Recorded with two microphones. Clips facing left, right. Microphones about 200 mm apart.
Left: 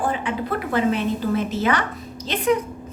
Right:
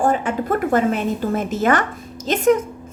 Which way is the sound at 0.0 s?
45° right (ahead or behind).